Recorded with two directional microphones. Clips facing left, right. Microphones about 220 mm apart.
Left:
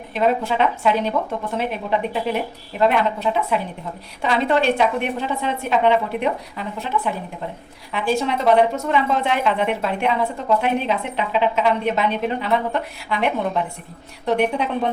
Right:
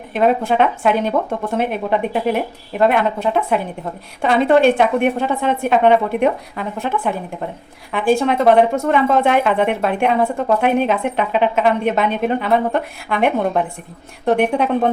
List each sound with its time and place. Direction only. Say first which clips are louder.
0.1 s speech: right 4 dB; 55° right (ahead or behind)